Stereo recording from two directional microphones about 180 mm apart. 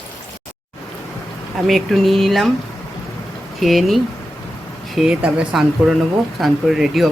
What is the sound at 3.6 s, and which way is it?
Speech, centre (ahead or behind).